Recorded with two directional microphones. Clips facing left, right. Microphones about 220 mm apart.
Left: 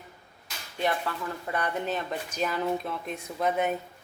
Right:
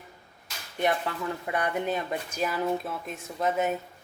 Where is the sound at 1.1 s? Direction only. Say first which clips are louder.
Right 1 dB; 20° right (ahead or behind).